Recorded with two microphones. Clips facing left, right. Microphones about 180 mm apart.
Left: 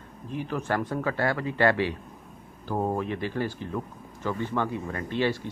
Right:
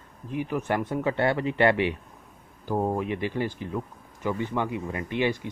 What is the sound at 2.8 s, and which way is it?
Speech, 10° right (ahead or behind).